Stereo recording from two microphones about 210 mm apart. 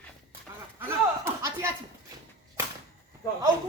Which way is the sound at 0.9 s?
10° right (ahead or behind).